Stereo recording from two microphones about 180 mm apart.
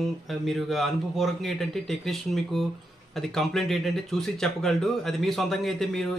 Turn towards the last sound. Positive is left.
turn(degrees=0)  # may be behind; listen again after turning